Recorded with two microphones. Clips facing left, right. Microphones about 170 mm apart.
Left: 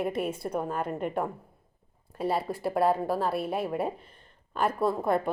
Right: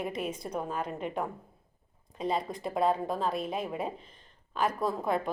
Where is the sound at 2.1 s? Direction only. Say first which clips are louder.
Left 3 dB; 5° left (ahead or behind).